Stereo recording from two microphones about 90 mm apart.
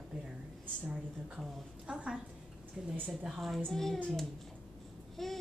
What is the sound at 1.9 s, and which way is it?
A woman's voice, 10° right (ahead or behind).